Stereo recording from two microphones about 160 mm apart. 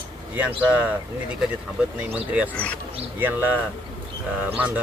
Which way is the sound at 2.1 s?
10° right (ahead or behind).